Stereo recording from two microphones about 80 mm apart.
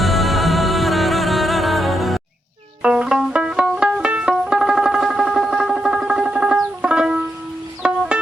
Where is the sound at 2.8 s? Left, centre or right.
Centre.